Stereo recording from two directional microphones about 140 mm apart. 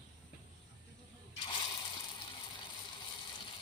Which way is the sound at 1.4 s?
35° left (ahead or behind).